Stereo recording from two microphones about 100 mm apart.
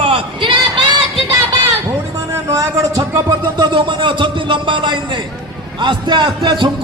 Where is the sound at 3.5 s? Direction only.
50° right (ahead or behind).